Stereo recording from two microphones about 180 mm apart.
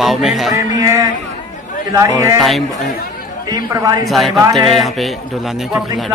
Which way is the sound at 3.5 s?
20° right (ahead or behind).